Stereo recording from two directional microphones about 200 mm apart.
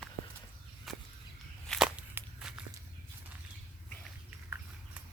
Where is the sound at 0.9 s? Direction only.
Centre (ahead or behind).